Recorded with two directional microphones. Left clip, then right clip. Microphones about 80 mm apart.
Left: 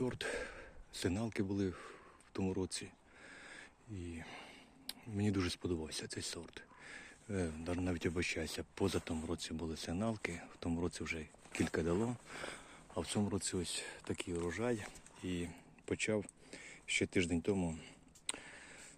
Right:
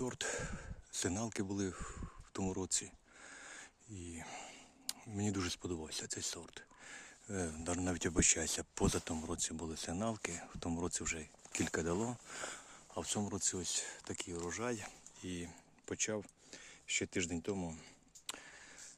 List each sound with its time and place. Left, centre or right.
0.0 s a sound: right
4.2 s whispering: right
5.1 s speech: right
7.6 s speech: right; by 14.4 s centre
14.6 s speech: right
15.9 s speech: centre
17.7 s a sound: centre